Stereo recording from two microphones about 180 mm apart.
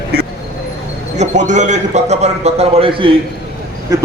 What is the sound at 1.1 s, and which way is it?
A man's voice, 40° right (ahead or behind).